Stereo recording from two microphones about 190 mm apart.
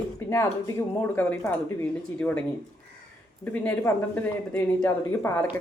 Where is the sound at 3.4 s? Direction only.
10° left (ahead or behind).